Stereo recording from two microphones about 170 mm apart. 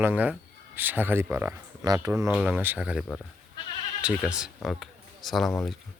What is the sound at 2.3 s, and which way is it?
Speech, 5° right (ahead or behind).